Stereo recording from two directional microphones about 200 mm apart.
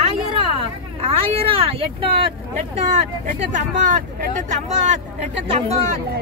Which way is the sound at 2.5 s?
35° right (ahead or behind).